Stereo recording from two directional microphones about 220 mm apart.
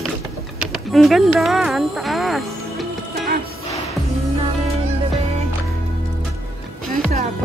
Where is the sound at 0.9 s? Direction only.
Centre (ahead or behind).